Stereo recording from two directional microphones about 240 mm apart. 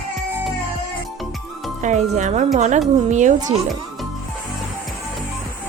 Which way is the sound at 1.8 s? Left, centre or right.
Right.